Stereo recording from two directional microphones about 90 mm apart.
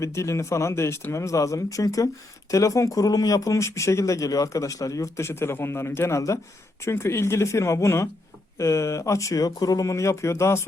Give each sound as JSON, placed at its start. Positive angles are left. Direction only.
{"t": 0.0, "sound": "speech", "side_deg": 35}